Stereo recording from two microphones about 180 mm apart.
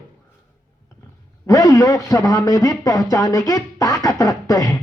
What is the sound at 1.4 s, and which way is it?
A man's voice, 20° left (ahead or behind).